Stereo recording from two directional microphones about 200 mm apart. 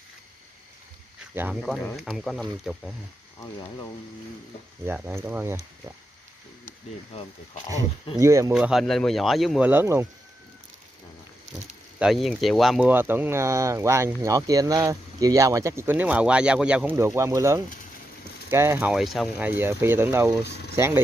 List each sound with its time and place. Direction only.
1.3 s speech: 5° right (ahead or behind)
4.8 s speech: 10° right (ahead or behind)
7.1 s speech: 30° left (ahead or behind)
7.7 s speech: 15° right (ahead or behind)
8.5 s speech: centre (ahead or behind)
12.0 s speech: centre (ahead or behind)